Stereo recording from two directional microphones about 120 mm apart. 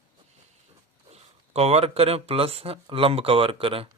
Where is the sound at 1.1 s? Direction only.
60° right (ahead or behind).